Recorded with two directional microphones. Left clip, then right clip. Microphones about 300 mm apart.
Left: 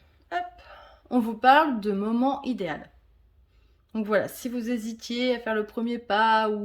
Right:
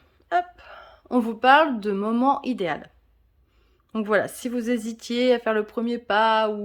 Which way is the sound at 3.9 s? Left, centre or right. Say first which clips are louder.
Right 3 dB; centre.